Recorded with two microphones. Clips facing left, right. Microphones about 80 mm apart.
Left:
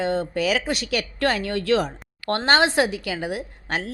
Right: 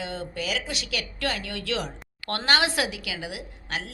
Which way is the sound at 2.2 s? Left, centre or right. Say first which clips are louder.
Left 5 dB; left.